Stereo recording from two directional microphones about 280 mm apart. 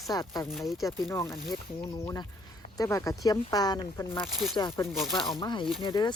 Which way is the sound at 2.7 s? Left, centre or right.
Centre.